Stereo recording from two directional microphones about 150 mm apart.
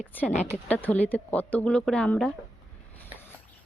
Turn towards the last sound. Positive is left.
turn(degrees=5)  # may be behind; listen again after turning